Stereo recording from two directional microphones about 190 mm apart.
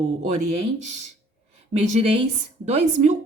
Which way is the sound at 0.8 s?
40° right (ahead or behind).